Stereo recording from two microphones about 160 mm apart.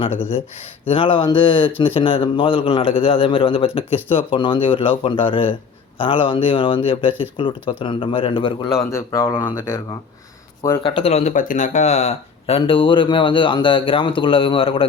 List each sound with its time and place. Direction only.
0.9 s speech: 35° left (ahead or behind)
8.9 s speech: 20° left (ahead or behind)
10.6 s speech: 30° left (ahead or behind)